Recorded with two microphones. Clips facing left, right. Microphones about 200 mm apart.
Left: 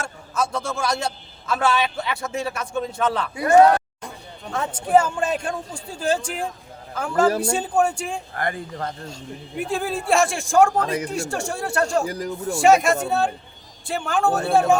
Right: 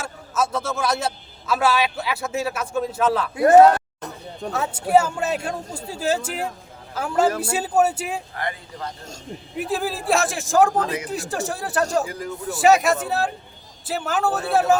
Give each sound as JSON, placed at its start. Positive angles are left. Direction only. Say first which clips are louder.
{"t": 0.0, "sound": "a man's voice", "louder": "right 1 dB", "side_deg": -5}
{"t": 4.5, "sound": "a man's voice", "louder": "even", "side_deg": -5}
{"t": 8.4, "sound": "speech", "louder": "left 3 dB", "side_deg": 50}
{"t": 9.6, "sound": "a man's voice", "louder": "even", "side_deg": 0}
{"t": 12.0, "sound": "speech", "louder": "left 4 dB", "side_deg": 40}
{"t": 12.5, "sound": "a man's voice", "louder": "even", "side_deg": 0}